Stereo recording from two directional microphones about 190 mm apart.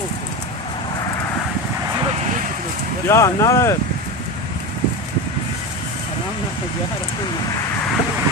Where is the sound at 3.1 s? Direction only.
15° left (ahead or behind).